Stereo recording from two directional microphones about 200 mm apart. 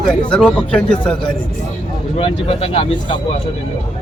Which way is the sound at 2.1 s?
30° left (ahead or behind).